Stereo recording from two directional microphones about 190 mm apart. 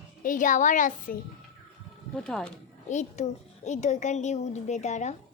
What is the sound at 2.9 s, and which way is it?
A child's voice, 40° left (ahead or behind).